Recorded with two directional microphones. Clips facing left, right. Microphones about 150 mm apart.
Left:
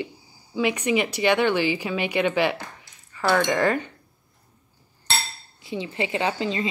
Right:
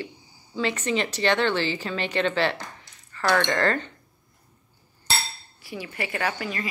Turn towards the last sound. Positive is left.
turn(degrees=20)  # may be behind; listen again after turning